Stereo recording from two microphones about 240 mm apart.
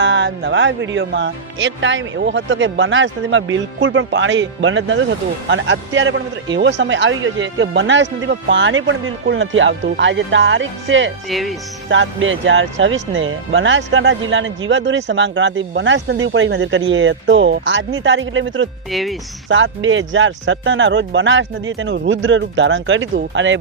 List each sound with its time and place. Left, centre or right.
0.0 s speech: right
11.3 s speech: centre
11.9 s speech: right
18.9 s speech: centre
19.5 s speech: right